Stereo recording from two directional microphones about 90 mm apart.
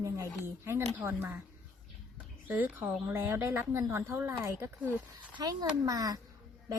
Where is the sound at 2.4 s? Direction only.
20° right (ahead or behind).